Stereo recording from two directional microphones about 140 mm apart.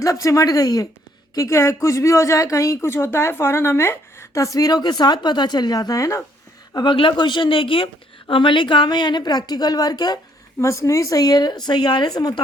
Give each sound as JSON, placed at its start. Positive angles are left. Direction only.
{"t": 0.0, "sound": "speech", "side_deg": 25}
{"t": 6.7, "sound": "a woman's voice", "side_deg": 35}